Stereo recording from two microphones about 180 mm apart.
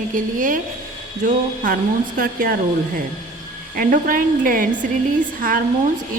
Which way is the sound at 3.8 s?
50° right (ahead or behind).